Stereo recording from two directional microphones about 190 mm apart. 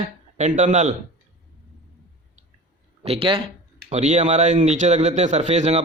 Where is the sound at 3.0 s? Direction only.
30° right (ahead or behind).